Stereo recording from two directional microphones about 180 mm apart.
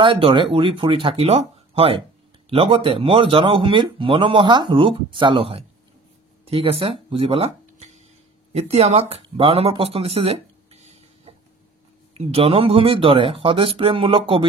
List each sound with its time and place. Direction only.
0.0 s speech: 30° right (ahead or behind)